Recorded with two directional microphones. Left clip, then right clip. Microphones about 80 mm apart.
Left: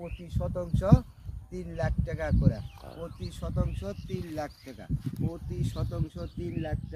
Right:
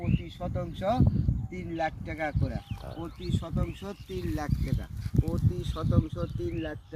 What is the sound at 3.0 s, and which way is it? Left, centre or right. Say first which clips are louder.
Speech: right 3 dB; left.